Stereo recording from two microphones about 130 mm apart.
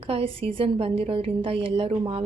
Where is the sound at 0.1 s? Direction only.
45° right (ahead or behind).